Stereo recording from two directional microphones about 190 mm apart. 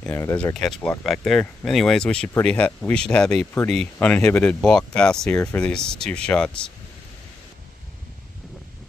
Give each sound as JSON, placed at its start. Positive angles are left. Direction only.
{"t": 0.0, "sound": "speech", "side_deg": 15}